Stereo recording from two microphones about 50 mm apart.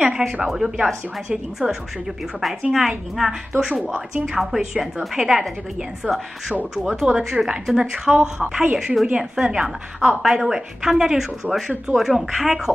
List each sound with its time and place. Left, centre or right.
0.0 s a woman's voice: centre
9.9 s a woman's voice: centre
10.3 s a woman's voice: centre